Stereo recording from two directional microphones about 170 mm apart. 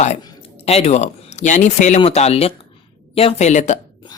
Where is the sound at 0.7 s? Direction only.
40° left (ahead or behind).